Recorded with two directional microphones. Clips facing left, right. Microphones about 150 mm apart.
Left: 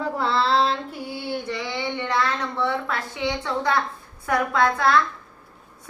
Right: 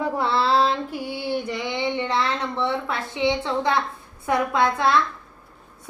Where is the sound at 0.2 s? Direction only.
5° right (ahead or behind).